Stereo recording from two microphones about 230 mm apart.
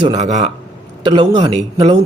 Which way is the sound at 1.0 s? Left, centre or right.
Centre.